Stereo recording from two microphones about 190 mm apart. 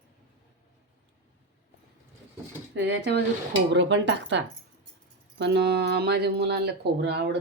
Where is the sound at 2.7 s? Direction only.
65° right (ahead or behind).